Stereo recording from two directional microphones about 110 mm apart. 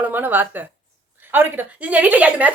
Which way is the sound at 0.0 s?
15° right (ahead or behind).